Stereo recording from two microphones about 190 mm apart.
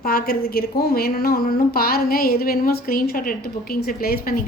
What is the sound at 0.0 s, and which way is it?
A woman's voice, 50° left (ahead or behind).